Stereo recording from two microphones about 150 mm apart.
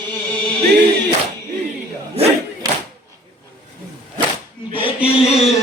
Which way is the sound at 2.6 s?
25° right (ahead or behind).